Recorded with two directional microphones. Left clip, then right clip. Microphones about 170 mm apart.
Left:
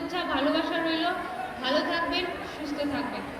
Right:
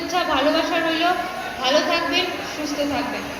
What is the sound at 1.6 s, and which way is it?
Speech, 25° right (ahead or behind).